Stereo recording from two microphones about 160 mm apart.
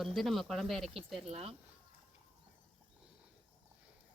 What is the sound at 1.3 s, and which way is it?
Speech, 40° right (ahead or behind).